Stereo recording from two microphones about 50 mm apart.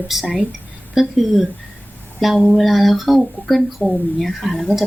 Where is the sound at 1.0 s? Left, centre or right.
Centre.